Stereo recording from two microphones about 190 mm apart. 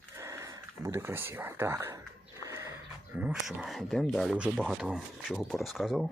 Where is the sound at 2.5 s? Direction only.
15° right (ahead or behind).